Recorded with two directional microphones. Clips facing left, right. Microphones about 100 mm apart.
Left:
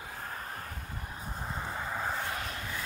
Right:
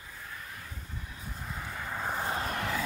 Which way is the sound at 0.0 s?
55° left (ahead or behind).